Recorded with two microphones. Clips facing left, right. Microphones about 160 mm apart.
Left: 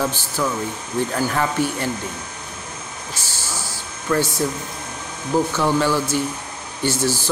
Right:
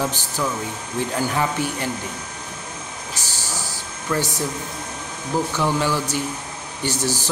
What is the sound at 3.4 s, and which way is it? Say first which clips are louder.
Vehicle: left 1 dB; 40° right (ahead or behind).